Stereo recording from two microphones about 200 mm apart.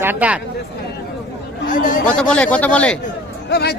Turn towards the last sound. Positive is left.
turn(degrees=55)  # may be behind; listen again after turning